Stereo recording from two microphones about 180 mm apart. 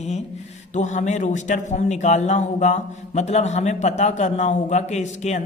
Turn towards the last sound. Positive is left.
turn(degrees=40)  # may be behind; listen again after turning